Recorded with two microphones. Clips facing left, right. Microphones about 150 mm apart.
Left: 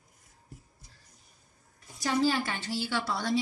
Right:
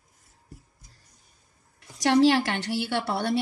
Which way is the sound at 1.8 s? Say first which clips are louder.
Right 8 dB; 75° right (ahead or behind).